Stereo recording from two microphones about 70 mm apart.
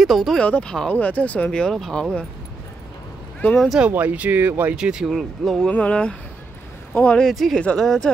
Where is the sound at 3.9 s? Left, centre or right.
Right.